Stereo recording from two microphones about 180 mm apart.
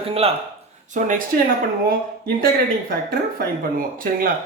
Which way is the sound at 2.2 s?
55° right (ahead or behind).